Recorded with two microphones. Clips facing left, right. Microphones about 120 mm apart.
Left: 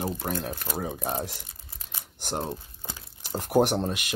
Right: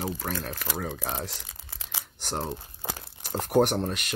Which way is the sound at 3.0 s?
45° right (ahead or behind).